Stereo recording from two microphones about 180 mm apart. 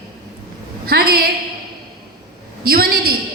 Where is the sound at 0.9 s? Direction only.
55° right (ahead or behind).